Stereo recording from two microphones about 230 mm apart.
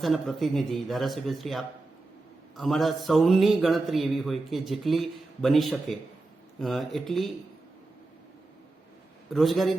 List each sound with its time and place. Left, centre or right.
0.0 s a man's voice: centre
9.3 s a man's voice: centre